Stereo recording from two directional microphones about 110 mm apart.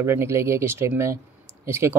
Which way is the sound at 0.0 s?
25° right (ahead or behind).